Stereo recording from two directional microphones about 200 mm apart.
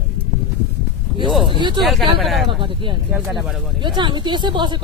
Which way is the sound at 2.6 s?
25° right (ahead or behind).